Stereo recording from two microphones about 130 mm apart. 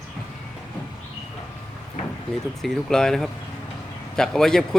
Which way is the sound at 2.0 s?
60° left (ahead or behind).